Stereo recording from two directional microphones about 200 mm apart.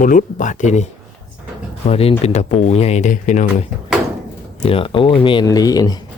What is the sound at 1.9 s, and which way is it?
Speech, 30° left (ahead or behind).